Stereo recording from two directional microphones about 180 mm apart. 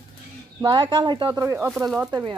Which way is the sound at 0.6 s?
25° right (ahead or behind).